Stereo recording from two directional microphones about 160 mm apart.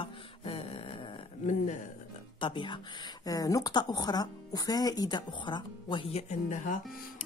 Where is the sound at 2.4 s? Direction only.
30° left (ahead or behind).